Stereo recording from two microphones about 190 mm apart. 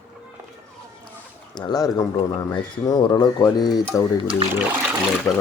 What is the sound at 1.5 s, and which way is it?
Speech, 20° left (ahead or behind).